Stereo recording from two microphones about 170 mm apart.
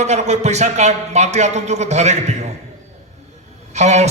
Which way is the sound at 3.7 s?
40° right (ahead or behind).